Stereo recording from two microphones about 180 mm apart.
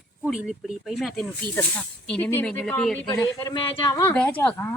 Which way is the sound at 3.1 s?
20° left (ahead or behind).